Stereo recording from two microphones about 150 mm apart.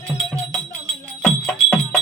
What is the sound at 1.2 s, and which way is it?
Music, 5° left (ahead or behind).